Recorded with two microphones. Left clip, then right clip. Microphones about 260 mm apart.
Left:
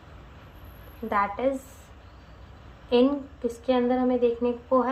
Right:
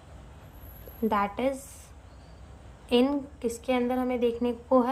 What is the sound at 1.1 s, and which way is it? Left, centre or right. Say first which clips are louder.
Speech: left 3 dB; right.